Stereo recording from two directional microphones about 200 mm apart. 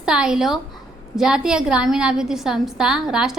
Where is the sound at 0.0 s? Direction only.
5° right (ahead or behind).